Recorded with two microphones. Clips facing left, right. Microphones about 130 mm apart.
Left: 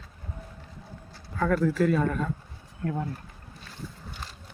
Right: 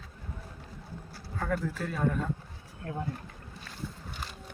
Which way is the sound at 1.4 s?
90° left.